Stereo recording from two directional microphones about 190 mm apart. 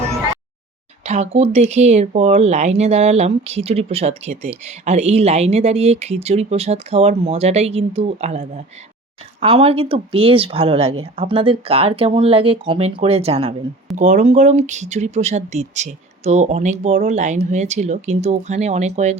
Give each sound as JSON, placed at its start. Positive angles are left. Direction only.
{"t": 1.0, "sound": "speech", "side_deg": -35}